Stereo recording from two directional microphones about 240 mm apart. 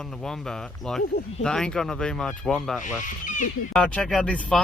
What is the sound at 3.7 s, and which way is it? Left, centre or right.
Speech, centre.